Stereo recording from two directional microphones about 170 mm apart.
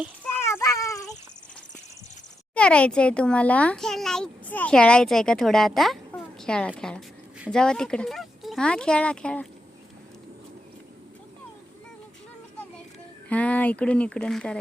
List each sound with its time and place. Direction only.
0.2 s a sound: 10° left (ahead or behind)
2.6 s a child's voice: 5° left (ahead or behind)
13.2 s speech: 10° left (ahead or behind)